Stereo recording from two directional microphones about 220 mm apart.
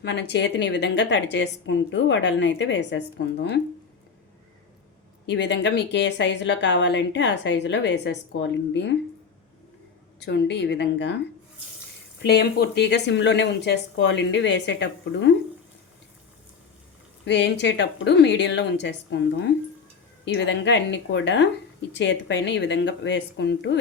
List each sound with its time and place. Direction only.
0.0 s a woman's voice: 50° left (ahead or behind)
5.2 s a woman's voice: 55° left (ahead or behind)
10.2 s a woman's voice: 50° left (ahead or behind)
12.2 s a woman's voice: 45° left (ahead or behind)
17.2 s a woman's voice: 50° left (ahead or behind)